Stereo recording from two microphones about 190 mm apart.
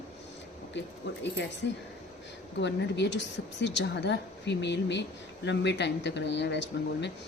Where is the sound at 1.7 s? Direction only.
70° left (ahead or behind).